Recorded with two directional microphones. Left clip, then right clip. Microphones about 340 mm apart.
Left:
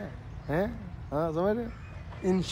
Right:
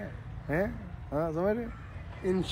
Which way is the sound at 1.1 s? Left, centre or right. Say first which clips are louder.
Left 1 dB; centre.